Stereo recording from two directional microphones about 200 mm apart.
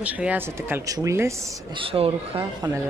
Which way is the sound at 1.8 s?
25° right (ahead or behind).